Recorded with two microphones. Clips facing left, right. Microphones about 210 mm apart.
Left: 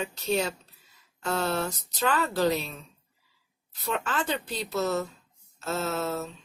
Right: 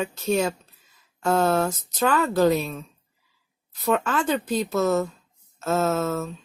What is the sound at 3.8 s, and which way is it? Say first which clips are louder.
Speech: right 7 dB; 50° right (ahead or behind).